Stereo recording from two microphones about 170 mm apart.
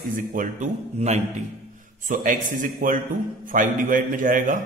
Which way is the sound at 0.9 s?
40° right (ahead or behind).